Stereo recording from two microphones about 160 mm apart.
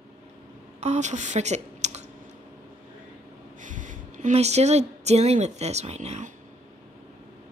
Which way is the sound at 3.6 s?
55° right (ahead or behind).